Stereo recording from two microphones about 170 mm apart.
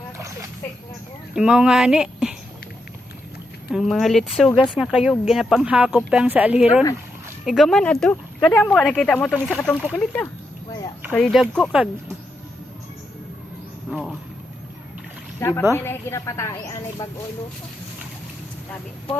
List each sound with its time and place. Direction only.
1.4 s speech: 5° right (ahead or behind)
3.7 s speech: centre (ahead or behind)
11.1 s speech: centre (ahead or behind)
13.9 s a sound: 5° left (ahead or behind)
15.4 s a woman's voice: 15° left (ahead or behind)